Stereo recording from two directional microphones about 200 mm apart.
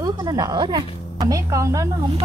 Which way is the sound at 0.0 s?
20° right (ahead or behind).